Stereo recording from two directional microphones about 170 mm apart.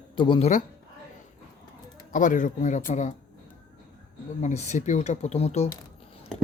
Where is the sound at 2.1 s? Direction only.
50° left (ahead or behind).